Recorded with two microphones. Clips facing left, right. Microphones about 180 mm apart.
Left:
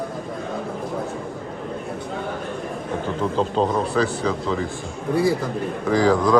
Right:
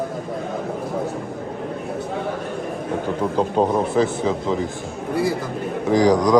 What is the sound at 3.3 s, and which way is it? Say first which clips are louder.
A man's voice: right 2 dB; 15° right (ahead or behind).